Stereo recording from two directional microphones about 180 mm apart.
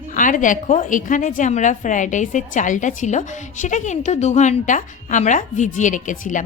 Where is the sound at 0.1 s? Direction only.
45° left (ahead or behind).